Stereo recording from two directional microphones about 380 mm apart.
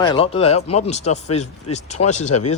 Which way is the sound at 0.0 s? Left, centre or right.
Centre.